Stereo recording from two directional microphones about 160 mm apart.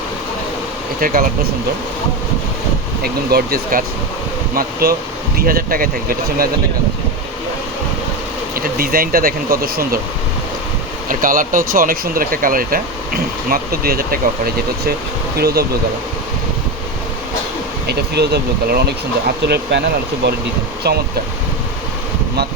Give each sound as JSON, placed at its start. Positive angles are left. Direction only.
{"t": 0.9, "sound": "speech", "side_deg": -60}
{"t": 3.0, "sound": "speech", "side_deg": -75}
{"t": 8.5, "sound": "speech", "side_deg": -65}
{"t": 11.1, "sound": "speech", "side_deg": -60}
{"t": 15.4, "sound": "speech", "side_deg": -80}
{"t": 17.8, "sound": "speech", "side_deg": -90}
{"t": 20.8, "sound": "speech", "side_deg": -90}